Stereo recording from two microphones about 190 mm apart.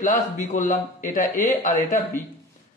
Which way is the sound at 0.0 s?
40° left (ahead or behind).